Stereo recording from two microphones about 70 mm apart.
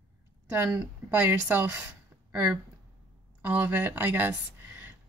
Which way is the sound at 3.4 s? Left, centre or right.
Right.